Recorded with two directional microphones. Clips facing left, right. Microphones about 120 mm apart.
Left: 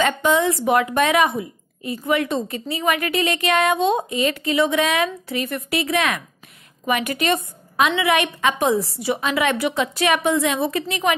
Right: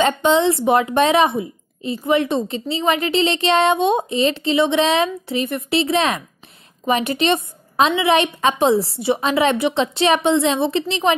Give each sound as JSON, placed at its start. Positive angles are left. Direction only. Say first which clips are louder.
{"t": 0.0, "sound": "speech", "louder": "right 3 dB", "side_deg": -30}